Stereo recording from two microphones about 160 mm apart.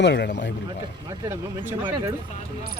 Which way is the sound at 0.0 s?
90° left.